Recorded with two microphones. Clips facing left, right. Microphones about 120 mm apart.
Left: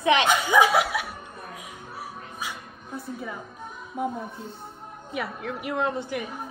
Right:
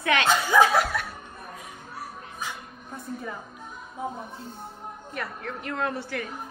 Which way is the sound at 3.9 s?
60° left (ahead or behind).